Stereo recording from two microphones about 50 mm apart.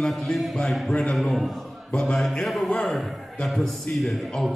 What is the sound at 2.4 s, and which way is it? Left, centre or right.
A man's voice, centre.